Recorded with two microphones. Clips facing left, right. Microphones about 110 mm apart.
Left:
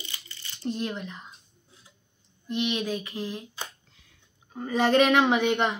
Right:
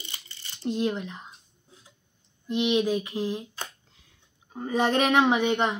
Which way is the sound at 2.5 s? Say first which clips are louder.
Right 4 dB; 20° right (ahead or behind).